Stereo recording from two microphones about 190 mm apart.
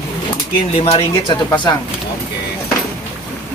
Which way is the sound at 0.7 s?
30° left (ahead or behind).